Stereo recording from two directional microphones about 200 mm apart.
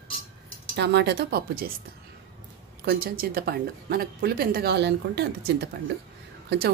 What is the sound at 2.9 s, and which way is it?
A woman's voice, 50° right (ahead or behind).